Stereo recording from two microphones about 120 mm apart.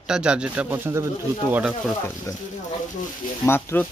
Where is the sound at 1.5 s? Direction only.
10° right (ahead or behind).